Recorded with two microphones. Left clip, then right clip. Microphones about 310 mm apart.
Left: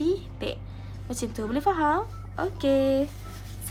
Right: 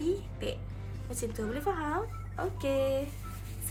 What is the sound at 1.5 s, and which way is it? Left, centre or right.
Speech, left.